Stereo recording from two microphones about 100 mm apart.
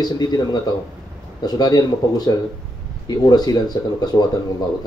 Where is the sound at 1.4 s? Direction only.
40° left (ahead or behind).